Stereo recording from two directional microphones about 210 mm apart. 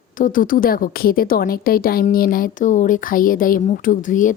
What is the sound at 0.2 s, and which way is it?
A woman's voice, 40° left (ahead or behind).